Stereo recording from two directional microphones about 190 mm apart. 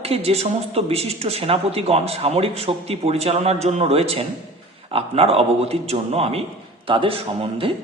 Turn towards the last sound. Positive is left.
turn(degrees=-30)  # may be behind; listen again after turning